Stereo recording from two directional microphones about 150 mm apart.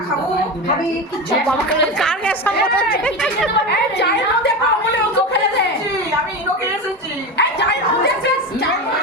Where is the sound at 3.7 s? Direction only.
90° left.